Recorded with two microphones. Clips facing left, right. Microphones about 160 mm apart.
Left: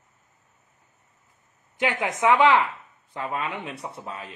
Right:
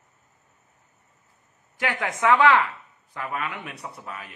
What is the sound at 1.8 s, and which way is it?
A woman's voice, 20° left (ahead or behind).